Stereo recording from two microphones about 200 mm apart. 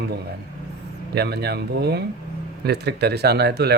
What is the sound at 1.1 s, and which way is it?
Speech, 55° right (ahead or behind).